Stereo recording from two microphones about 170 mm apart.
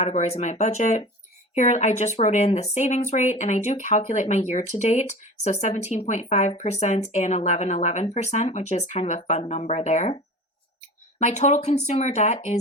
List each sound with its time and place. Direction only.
0.0 s speech: 40° left (ahead or behind)
11.2 s speech: 45° left (ahead or behind)